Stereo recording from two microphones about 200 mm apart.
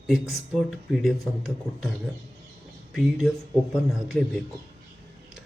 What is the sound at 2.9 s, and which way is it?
Speech, centre (ahead or behind).